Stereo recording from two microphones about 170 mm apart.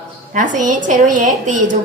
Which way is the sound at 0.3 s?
50° right (ahead or behind).